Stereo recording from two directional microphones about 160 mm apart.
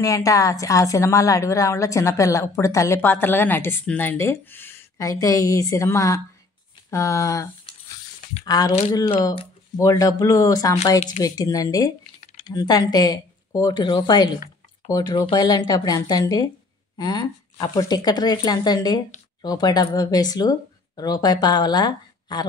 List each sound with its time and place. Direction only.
0.0 s a woman's voice: 20° left (ahead or behind)
8.5 s a woman's voice: 25° left (ahead or behind)
9.8 s a woman's voice: 20° left (ahead or behind)